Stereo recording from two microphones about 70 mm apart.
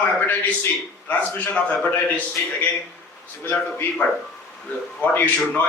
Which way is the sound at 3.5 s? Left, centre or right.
Left.